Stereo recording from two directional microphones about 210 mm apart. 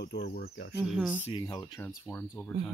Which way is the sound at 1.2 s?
20° left (ahead or behind).